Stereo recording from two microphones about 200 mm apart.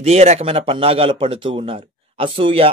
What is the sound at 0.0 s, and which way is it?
Speech, 30° right (ahead or behind).